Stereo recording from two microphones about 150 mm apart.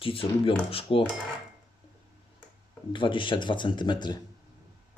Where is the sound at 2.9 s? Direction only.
35° left (ahead or behind).